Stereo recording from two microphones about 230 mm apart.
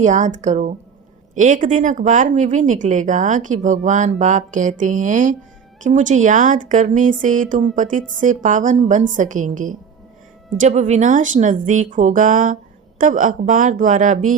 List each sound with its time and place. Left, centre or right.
0.0 s speech: right